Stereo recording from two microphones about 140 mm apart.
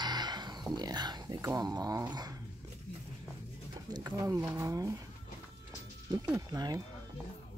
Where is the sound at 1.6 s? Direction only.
25° right (ahead or behind).